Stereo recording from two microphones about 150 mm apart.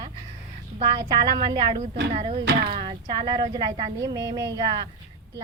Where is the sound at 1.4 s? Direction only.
35° right (ahead or behind).